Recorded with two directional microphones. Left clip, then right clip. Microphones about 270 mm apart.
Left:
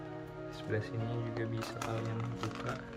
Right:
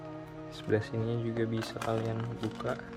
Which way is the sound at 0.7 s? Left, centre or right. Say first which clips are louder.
Right 8 dB; right.